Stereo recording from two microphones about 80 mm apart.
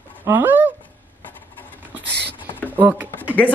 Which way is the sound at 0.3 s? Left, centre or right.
Right.